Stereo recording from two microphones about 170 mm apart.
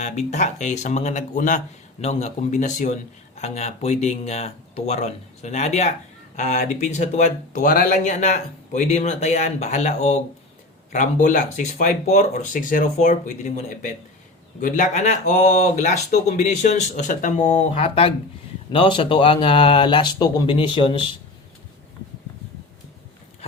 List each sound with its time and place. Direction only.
0.0 s speech: 45° left (ahead or behind)
17.4 s speech: 40° left (ahead or behind)